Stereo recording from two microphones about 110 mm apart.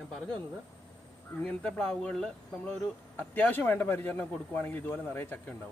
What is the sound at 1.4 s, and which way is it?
Speech, 10° left (ahead or behind).